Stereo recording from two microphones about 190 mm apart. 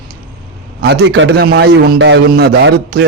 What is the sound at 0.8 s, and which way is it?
A man's voice, 70° right (ahead or behind).